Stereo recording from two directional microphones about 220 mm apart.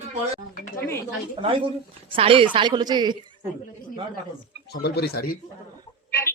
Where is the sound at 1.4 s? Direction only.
25° right (ahead or behind).